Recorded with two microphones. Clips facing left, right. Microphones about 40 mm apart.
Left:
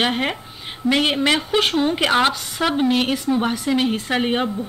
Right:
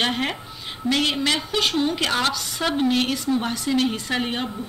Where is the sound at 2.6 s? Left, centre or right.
Centre.